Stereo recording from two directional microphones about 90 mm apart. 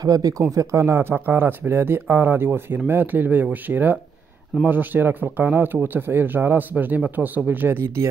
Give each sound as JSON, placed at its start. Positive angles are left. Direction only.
{"t": 0.0, "sound": "speech", "side_deg": -45}